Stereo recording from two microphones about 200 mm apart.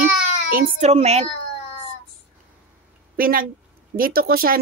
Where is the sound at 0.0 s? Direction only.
45° right (ahead or behind).